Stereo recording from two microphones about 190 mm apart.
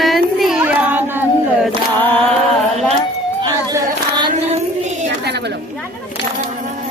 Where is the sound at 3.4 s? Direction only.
25° right (ahead or behind).